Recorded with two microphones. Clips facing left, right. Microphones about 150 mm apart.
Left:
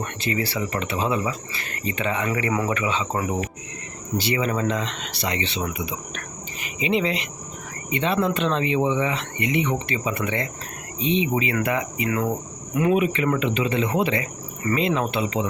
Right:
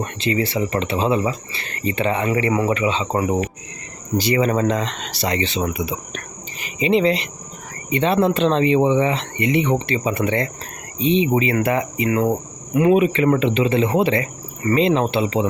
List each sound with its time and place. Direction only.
0.0 s speech: 20° right (ahead or behind)
2.5 s speech: 20° right (ahead or behind)
4.2 s speech: 40° right (ahead or behind)